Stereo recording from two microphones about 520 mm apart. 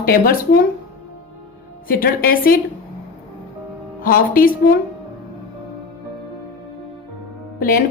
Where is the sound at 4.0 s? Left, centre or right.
Centre.